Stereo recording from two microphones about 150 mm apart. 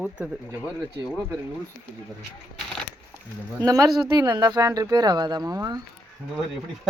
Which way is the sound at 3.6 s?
25° right (ahead or behind).